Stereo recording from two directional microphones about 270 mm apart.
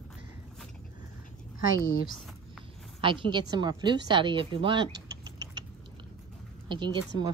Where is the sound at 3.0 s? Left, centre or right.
Centre.